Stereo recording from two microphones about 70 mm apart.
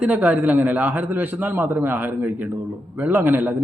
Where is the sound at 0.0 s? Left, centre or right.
Right.